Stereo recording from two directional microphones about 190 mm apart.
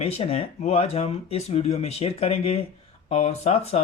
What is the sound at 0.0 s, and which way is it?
Speech, 30° left (ahead or behind).